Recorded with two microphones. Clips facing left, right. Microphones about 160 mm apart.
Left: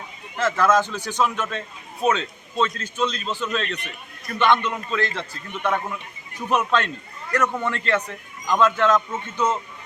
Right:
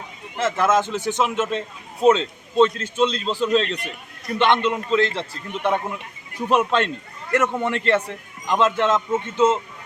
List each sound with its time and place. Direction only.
0.3 s a man's voice: 25° right (ahead or behind)